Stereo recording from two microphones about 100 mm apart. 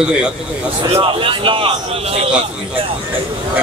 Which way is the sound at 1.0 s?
60° right (ahead or behind).